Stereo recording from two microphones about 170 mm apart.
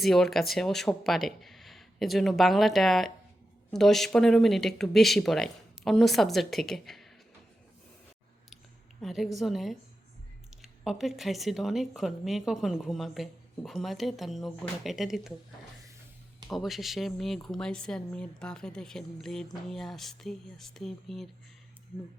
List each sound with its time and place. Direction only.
0.0 s speech: centre (ahead or behind)
9.0 s speech: centre (ahead or behind)
16.5 s speech: centre (ahead or behind)